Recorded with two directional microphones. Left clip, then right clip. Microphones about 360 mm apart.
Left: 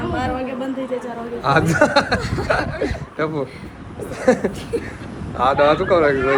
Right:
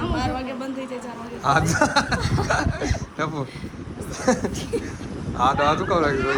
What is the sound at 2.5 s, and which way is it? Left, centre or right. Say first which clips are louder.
A man's voice: left 5 dB; centre.